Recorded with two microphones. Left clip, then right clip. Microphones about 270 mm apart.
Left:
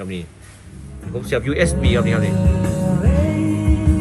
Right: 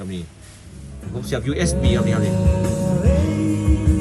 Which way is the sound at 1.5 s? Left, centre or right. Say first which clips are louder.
Left 3 dB; centre.